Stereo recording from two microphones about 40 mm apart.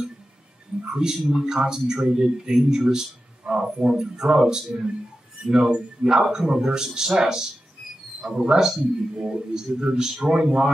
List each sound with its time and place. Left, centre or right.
0.8 s a man's voice: centre